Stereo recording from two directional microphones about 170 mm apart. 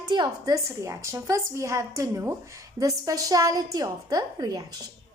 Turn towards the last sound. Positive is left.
turn(degrees=-20)  # may be behind; listen again after turning